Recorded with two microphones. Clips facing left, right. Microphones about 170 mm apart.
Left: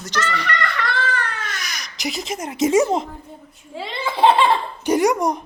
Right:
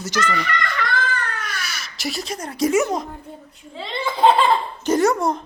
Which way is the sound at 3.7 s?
5° left (ahead or behind).